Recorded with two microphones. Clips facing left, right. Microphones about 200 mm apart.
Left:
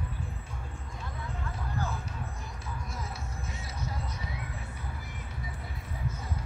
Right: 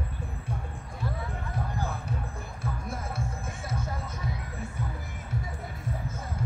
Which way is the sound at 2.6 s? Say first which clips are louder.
Right 6 dB; 55° right (ahead or behind).